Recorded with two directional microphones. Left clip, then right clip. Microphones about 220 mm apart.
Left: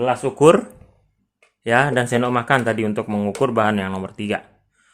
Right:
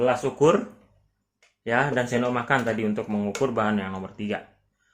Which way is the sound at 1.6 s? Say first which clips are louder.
Left 6 dB; 50° left (ahead or behind).